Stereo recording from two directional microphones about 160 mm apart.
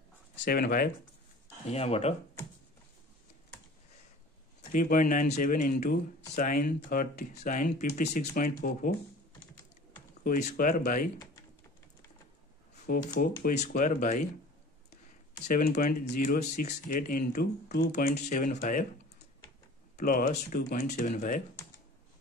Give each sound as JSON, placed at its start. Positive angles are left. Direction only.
{"t": 0.5, "sound": "speech", "side_deg": 65}
{"t": 1.7, "sound": "speech", "side_deg": 40}
{"t": 4.7, "sound": "speech", "side_deg": 60}
{"t": 10.2, "sound": "speech", "side_deg": 60}
{"t": 12.8, "sound": "speech", "side_deg": 60}
{"t": 15.4, "sound": "speech", "side_deg": 70}
{"t": 16.3, "sound": "speech", "side_deg": 50}
{"t": 17.9, "sound": "speech", "side_deg": 50}
{"t": 20.0, "sound": "speech", "side_deg": 60}
{"t": 20.8, "sound": "speech", "side_deg": 45}